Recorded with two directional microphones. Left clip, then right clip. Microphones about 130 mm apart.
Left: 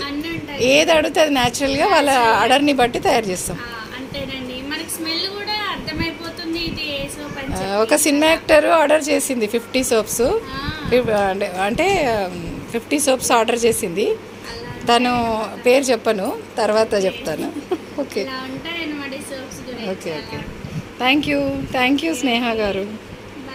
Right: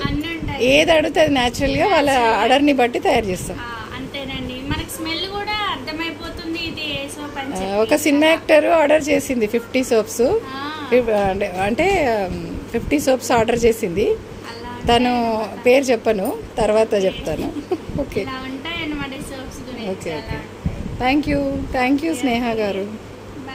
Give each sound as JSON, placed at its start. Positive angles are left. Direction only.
{"t": 0.6, "sound": "a woman's voice", "side_deg": -15}
{"t": 5.5, "sound": "a sound", "side_deg": -15}
{"t": 7.6, "sound": "a woman's voice", "side_deg": -15}
{"t": 21.0, "sound": "a woman's voice", "side_deg": -5}